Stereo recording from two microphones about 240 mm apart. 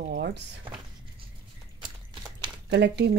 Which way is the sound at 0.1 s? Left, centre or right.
Right.